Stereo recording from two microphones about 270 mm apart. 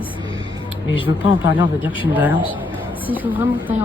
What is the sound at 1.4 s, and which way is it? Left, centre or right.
Speech, left.